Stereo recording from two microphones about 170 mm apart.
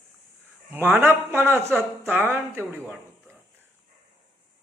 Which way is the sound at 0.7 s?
10° right (ahead or behind).